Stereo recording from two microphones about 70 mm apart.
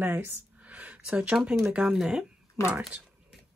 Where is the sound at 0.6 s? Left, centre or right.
Right.